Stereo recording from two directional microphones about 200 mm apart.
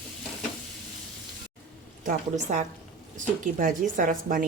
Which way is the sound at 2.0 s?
40° right (ahead or behind).